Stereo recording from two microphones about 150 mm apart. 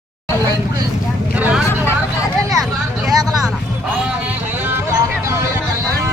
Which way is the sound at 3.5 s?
5° right (ahead or behind).